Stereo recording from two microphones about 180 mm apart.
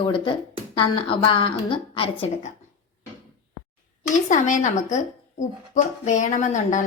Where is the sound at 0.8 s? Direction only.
30° left (ahead or behind).